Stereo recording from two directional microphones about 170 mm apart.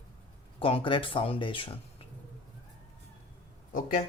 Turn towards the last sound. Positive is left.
turn(degrees=50)  # may be behind; listen again after turning